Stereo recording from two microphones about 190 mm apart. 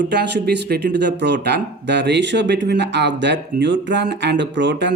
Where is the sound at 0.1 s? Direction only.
60° right (ahead or behind).